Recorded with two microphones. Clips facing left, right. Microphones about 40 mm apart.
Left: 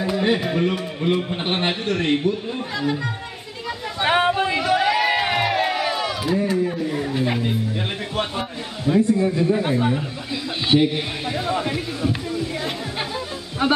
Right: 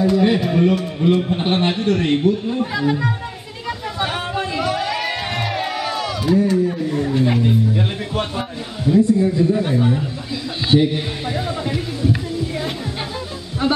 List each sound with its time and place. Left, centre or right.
0.0 s a man's voice: centre
2.6 s speech: centre
4.0 s a sound: left
4.3 s crowd: centre
7.2 s a man's voice: centre
8.9 s a man's voice: left
9.7 s a man's voice: centre
11.2 s a man's voice: centre
11.5 s a man's voice: left